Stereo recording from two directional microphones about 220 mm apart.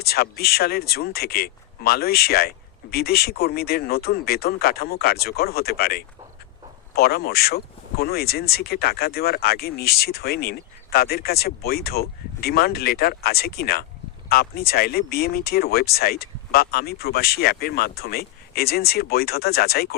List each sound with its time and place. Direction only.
0.0 s speech: 45° left (ahead or behind)